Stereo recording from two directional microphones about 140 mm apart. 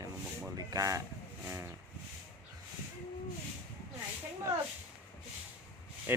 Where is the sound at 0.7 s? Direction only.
25° right (ahead or behind).